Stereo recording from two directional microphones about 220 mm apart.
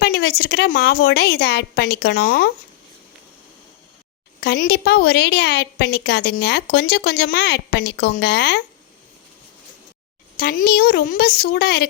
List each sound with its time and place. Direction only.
0.0 s a woman's voice: 45° left (ahead or behind)
4.4 s a woman's voice: 45° left (ahead or behind)
10.3 s a woman's voice: 40° left (ahead or behind)